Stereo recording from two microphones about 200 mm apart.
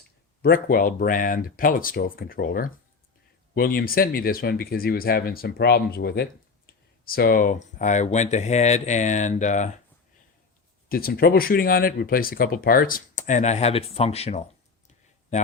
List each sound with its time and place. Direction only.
0.4 s speech: 50° left (ahead or behind)
10.8 s speech: 50° left (ahead or behind); by 14.4 s 30° left (ahead or behind)